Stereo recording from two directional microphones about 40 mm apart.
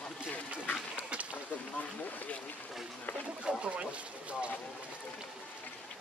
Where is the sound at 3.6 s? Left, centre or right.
Right.